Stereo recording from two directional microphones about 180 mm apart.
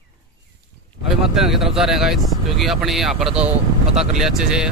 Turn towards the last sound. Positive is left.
turn(degrees=-5)  # may be behind; listen again after turning